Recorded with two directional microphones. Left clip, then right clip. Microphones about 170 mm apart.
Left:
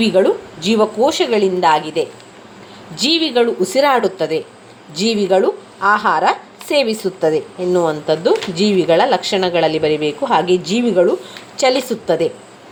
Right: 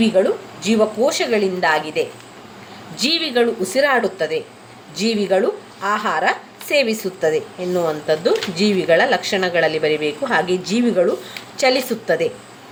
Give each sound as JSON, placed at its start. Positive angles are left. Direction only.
{"t": 0.0, "sound": "a woman's voice", "side_deg": 35}